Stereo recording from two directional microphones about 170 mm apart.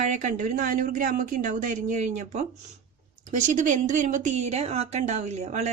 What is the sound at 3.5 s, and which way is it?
Speech, 45° right (ahead or behind).